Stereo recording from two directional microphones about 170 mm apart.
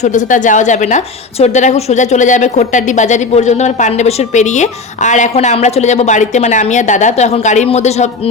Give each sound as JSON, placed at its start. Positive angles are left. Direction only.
{"t": 0.0, "sound": "a woman's voice", "side_deg": 45}